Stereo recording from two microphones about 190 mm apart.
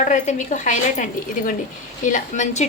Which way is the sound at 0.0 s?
40° left (ahead or behind).